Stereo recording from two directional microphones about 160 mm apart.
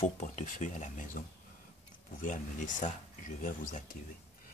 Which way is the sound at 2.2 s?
55° left (ahead or behind).